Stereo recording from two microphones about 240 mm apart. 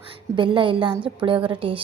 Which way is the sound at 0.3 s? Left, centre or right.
Centre.